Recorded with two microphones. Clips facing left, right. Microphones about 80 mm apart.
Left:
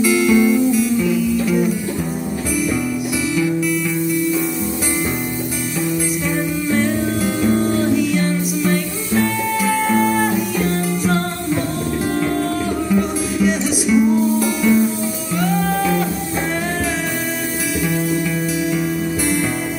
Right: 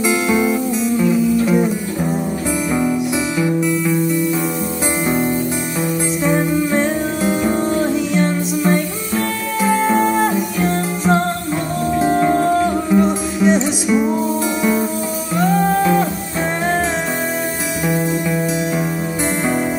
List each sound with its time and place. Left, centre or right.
0.0 s music: right
3.3 s music: right
5.8 s music: right
17.8 s music: right